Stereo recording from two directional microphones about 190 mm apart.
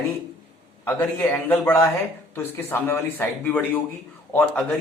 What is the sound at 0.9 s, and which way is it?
Speech, 10° left (ahead or behind).